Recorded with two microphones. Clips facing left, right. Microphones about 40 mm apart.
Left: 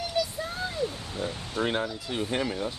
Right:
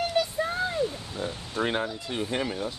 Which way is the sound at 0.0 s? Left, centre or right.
Right.